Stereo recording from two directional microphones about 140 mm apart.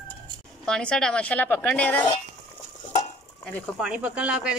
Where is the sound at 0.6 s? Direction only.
5° left (ahead or behind).